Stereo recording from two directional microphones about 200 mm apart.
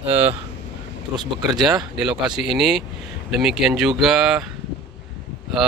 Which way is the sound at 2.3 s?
Centre (ahead or behind).